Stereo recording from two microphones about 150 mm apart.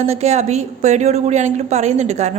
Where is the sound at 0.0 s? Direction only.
45° right (ahead or behind).